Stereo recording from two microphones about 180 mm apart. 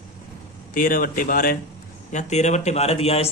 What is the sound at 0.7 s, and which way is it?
Speech, 50° left (ahead or behind).